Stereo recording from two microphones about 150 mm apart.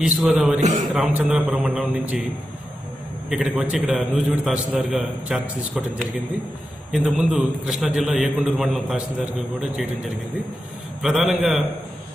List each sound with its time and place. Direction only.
0.0 s a man's voice: 5° right (ahead or behind)
0.6 s a man's voice: 50° right (ahead or behind)
1.1 s a man's voice: 5° right (ahead or behind)
3.3 s a man's voice: centre (ahead or behind)
6.9 s a man's voice: 5° right (ahead or behind)
11.0 s a man's voice: centre (ahead or behind)